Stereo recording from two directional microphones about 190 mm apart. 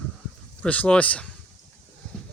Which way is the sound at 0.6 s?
5° left (ahead or behind).